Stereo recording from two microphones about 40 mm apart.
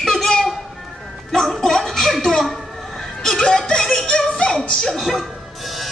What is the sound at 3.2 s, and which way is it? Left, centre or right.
Music, centre.